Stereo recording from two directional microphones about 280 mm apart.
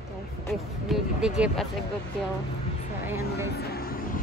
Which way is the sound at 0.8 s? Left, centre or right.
Centre.